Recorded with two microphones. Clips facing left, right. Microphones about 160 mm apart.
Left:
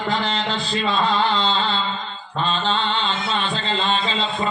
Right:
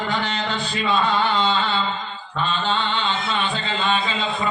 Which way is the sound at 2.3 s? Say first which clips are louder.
Left 1 dB; 35° left (ahead or behind).